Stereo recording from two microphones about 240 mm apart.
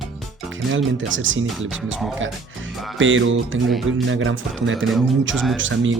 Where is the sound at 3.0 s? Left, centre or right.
Right.